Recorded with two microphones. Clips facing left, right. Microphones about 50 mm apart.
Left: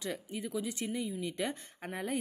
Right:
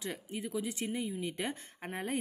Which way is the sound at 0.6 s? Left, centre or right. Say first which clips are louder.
Even; right.